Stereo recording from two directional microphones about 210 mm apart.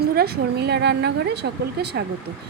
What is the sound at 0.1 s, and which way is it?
A woman's voice, 50° right (ahead or behind).